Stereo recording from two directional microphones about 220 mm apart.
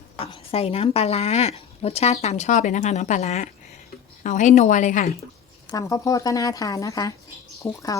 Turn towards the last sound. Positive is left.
turn(degrees=20)  # may be behind; listen again after turning